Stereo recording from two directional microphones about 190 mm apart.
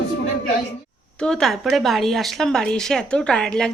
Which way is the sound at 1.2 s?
5° left (ahead or behind).